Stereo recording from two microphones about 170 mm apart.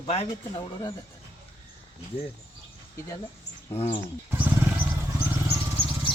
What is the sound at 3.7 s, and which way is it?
Speech, 35° left (ahead or behind).